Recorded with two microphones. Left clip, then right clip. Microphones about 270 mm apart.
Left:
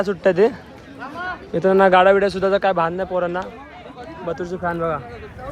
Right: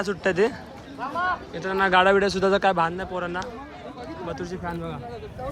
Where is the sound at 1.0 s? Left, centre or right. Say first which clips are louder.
Right 3 dB; right.